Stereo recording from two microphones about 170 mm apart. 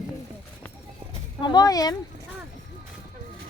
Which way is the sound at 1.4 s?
25° left (ahead or behind).